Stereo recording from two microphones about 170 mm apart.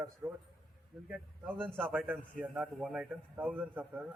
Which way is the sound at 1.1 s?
5° right (ahead or behind).